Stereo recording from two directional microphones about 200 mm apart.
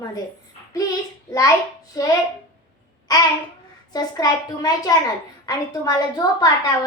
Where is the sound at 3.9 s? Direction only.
20° left (ahead or behind).